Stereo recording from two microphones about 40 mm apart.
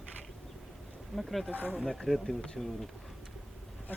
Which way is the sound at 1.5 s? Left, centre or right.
Right.